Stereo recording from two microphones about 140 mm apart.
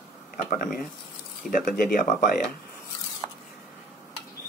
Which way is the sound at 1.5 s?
85° left.